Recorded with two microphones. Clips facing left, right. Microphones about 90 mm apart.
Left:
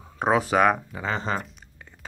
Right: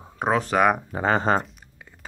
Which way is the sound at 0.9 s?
50° right (ahead or behind).